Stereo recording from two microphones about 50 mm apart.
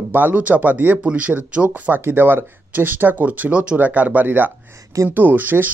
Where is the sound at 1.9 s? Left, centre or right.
Right.